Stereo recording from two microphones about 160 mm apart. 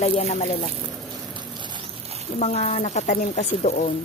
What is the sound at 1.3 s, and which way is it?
Patter, 30° right (ahead or behind).